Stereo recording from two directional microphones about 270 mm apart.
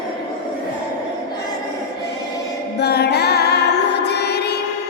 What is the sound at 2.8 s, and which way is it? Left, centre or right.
Music, left.